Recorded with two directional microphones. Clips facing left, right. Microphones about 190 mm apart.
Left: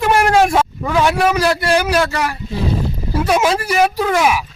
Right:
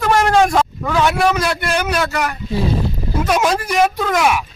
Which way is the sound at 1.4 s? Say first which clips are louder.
Left 4 dB; 35° left (ahead or behind).